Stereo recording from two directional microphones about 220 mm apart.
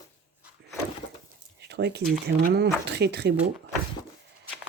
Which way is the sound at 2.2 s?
45° right (ahead or behind).